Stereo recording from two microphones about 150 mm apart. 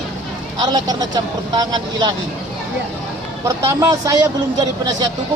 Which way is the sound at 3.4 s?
25° right (ahead or behind).